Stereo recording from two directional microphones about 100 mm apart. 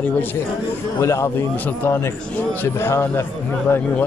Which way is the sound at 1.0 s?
30° left (ahead or behind).